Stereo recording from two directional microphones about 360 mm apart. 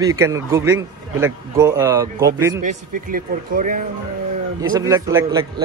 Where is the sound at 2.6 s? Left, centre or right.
Right.